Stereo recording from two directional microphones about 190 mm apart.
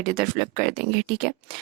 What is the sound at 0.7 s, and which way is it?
Speech, 60° right (ahead or behind).